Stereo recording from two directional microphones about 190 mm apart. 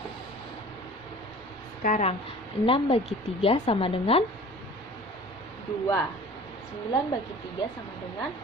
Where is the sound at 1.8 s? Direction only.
40° left (ahead or behind).